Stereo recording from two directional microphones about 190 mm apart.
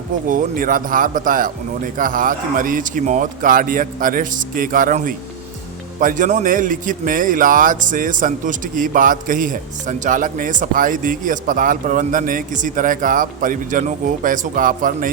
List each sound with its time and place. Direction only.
0.3 s a man's voice: 45° right (ahead or behind)